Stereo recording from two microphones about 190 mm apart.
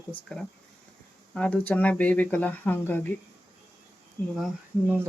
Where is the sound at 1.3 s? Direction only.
5° left (ahead or behind).